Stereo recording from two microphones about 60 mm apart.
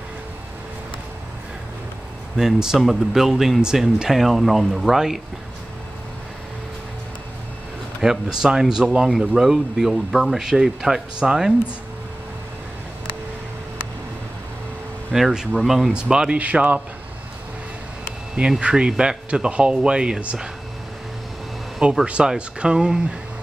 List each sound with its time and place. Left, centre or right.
2.3 s speech: centre
8.0 s speech: centre
15.1 s speech: centre
15.9 s a man's voice: centre
18.6 s speech: centre
22.0 s speech: centre